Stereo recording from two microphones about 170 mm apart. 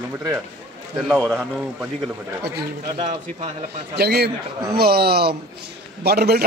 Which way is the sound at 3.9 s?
70° right (ahead or behind).